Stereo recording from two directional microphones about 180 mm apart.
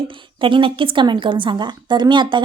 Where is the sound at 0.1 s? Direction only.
30° right (ahead or behind).